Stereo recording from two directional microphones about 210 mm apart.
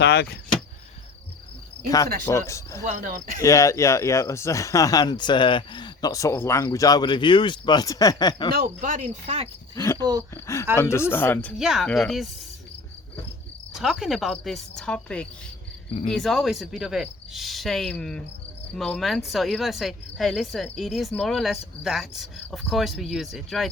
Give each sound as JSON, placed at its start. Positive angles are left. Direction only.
{"t": 0.0, "sound": "speech", "side_deg": 50}
{"t": 2.5, "sound": "speech", "side_deg": 15}
{"t": 2.8, "sound": "speech", "side_deg": -35}
{"t": 3.4, "sound": "speech", "side_deg": 15}
{"t": 8.5, "sound": "speech", "side_deg": -40}
{"t": 9.7, "sound": "speech", "side_deg": 15}
{"t": 10.0, "sound": "speech", "side_deg": -20}
{"t": 10.3, "sound": "speech", "side_deg": 15}
{"t": 13.7, "sound": "speech", "side_deg": 0}